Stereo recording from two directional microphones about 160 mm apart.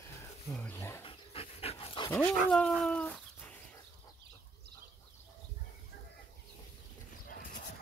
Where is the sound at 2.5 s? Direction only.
5° left (ahead or behind).